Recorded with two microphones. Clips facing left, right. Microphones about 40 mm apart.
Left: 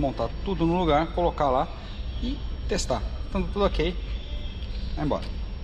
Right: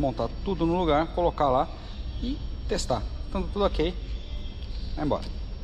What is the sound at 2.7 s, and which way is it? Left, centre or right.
Speech, left.